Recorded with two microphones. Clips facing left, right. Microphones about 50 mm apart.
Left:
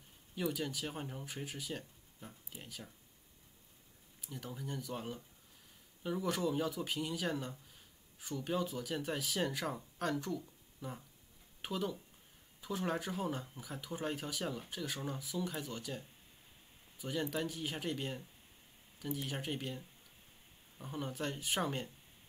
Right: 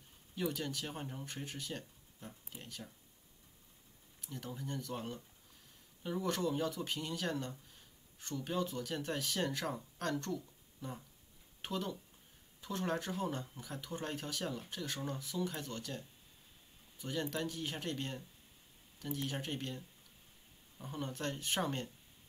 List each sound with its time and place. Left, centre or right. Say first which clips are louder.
0.4 s speech: left 1 dB; centre
4.2 s speech: right 1 dB; centre
20.8 s speech: even; centre